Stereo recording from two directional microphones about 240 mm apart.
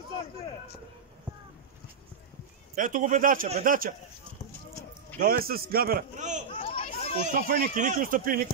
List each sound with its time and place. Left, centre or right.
2.7 s a man's voice: right
5.2 s a man's voice: right
6.5 s chatter: left
7.3 s a man's voice: right